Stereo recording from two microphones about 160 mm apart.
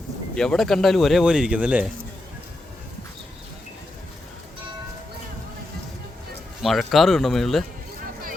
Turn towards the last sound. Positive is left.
turn(degrees=0)  # may be behind; listen again after turning